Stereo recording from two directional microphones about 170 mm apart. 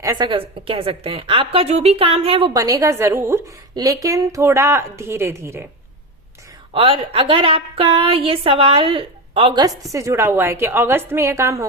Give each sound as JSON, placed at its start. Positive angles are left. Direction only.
{"t": 0.0, "sound": "a woman's voice", "side_deg": -25}
{"t": 2.5, "sound": "a woman's voice", "side_deg": -20}
{"t": 6.7, "sound": "a woman's voice", "side_deg": -35}